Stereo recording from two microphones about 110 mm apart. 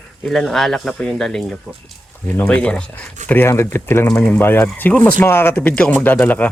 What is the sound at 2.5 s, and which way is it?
Speech, 10° left (ahead or behind).